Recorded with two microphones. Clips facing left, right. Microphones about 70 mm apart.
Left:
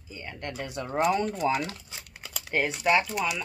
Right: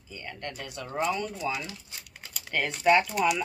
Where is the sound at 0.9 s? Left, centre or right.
Left.